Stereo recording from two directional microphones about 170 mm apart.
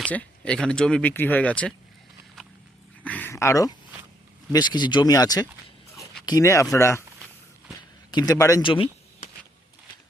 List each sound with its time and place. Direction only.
0.1 s speech: 5° left (ahead or behind)
3.0 s a sound: 10° left (ahead or behind)
4.5 s speech: 25° left (ahead or behind)
8.1 s speech: 25° left (ahead or behind)